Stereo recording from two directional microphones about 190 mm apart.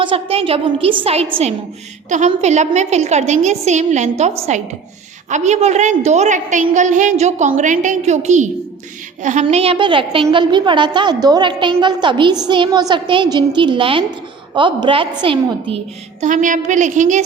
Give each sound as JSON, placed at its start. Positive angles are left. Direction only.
{"t": 0.0, "sound": "a woman's voice", "side_deg": -30}
{"t": 16.2, "sound": "a woman's voice", "side_deg": -45}